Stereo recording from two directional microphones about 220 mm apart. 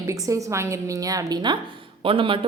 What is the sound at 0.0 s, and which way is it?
A woman's voice, 15° right (ahead or behind).